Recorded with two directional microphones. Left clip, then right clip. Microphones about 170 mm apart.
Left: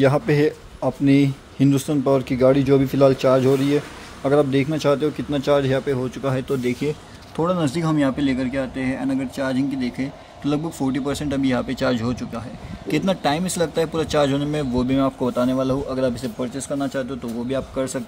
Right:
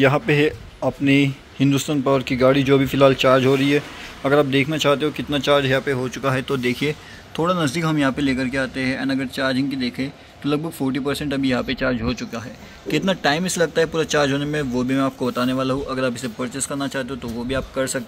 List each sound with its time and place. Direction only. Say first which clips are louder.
0.0 s speech: right 1 dB; 10° left (ahead or behind)
7.4 s speech: right 1 dB; 10° left (ahead or behind)
11.7 s speech: even; 30° left (ahead or behind)
12.2 s speech: right 1 dB; 10° left (ahead or behind)